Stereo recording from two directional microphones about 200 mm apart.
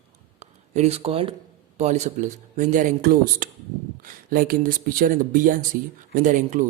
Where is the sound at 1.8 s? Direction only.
35° right (ahead or behind).